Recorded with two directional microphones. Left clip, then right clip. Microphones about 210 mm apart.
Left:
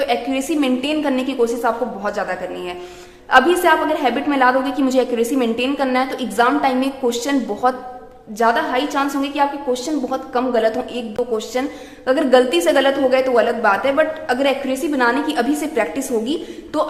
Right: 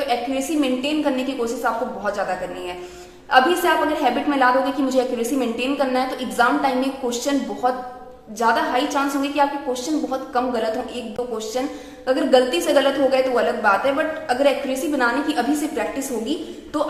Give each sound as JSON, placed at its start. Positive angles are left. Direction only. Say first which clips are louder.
{"t": 0.1, "sound": "a woman's voice", "louder": "left 2 dB", "side_deg": 35}
{"t": 3.2, "sound": "a woman's voice", "louder": "left 3 dB", "side_deg": 35}